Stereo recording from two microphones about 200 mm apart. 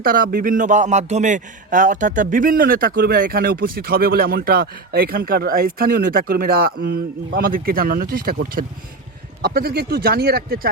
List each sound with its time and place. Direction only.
0.0 s a man's voice: 45° right (ahead or behind)
9.4 s a man's voice: 50° right (ahead or behind)